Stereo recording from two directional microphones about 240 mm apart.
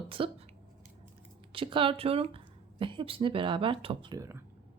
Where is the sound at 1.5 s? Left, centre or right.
Right.